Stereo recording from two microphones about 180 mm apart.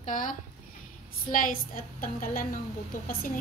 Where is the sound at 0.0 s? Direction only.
45° left (ahead or behind).